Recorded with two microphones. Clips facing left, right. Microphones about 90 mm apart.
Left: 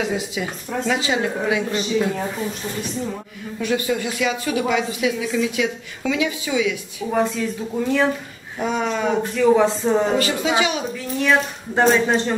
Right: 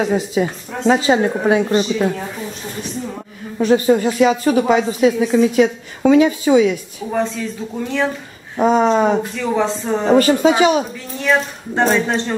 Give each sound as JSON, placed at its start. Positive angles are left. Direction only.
{"t": 0.0, "sound": "speech", "side_deg": -40}
{"t": 3.5, "sound": "speech", "side_deg": -35}
{"t": 7.1, "sound": "speech", "side_deg": 0}
{"t": 8.5, "sound": "speech", "side_deg": -40}
{"t": 9.3, "sound": "speech", "side_deg": 5}
{"t": 10.1, "sound": "speech", "side_deg": -40}
{"t": 11.2, "sound": "speech", "side_deg": 0}